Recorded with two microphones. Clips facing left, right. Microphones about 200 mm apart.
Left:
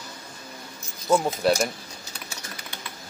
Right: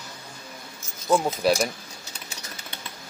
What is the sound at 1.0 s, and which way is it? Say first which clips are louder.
Speech: even; centre (ahead or behind).